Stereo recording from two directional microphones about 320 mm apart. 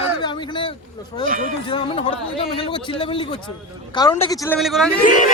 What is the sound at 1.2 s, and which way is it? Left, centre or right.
Speech, right.